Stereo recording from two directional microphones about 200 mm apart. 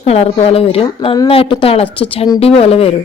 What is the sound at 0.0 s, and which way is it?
A woman's voice, 30° left (ahead or behind).